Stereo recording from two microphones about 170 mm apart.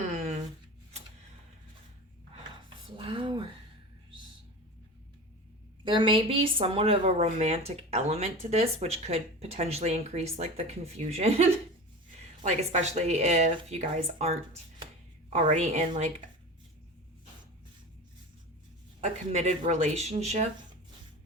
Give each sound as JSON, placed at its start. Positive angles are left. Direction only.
{"t": 2.8, "sound": "a sound", "side_deg": -30}
{"t": 5.8, "sound": "a woman's voice", "side_deg": -30}
{"t": 19.0, "sound": "speech", "side_deg": -40}